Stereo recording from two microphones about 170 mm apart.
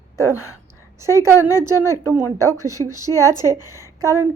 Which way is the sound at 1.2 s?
15° right (ahead or behind).